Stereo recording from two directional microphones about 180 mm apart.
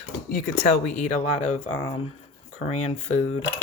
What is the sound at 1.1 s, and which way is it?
Speech, 35° left (ahead or behind).